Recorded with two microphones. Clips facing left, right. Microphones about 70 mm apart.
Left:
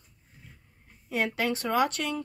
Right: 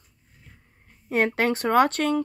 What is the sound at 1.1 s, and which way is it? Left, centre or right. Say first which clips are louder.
Speech: right 6 dB; right.